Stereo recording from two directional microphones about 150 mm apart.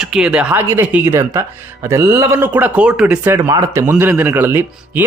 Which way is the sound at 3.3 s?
20° right (ahead or behind).